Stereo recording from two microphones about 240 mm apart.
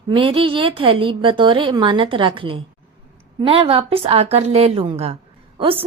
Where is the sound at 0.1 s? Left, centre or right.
Right.